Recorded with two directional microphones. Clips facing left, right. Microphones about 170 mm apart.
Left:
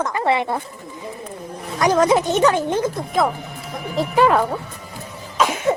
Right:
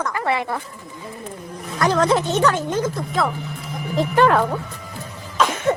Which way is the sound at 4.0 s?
5° left (ahead or behind).